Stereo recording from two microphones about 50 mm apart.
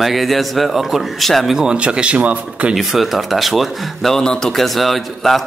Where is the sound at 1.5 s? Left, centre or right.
Centre.